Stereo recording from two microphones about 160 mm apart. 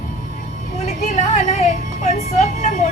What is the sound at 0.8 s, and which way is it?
Music, 45° left (ahead or behind).